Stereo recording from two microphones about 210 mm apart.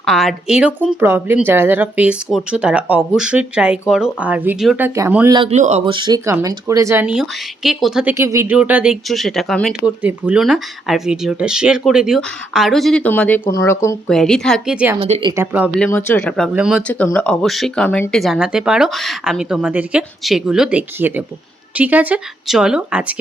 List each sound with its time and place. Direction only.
0.0 s speech: centre (ahead or behind)
5.4 s speech: 30° right (ahead or behind)
5.8 s speech: 20° right (ahead or behind); by 8.1 s centre (ahead or behind)
8.1 s speech: 15° right (ahead or behind); by 13.9 s 15° left (ahead or behind)
14.1 s speech: centre (ahead or behind)
14.9 s speech: 25° right (ahead or behind)
15.3 s speech: 10° right (ahead or behind)
15.7 s speech: 5° left (ahead or behind)
16.9 s speech: 10° left (ahead or behind)